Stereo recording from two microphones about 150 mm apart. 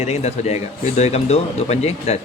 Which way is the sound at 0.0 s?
45° left (ahead or behind).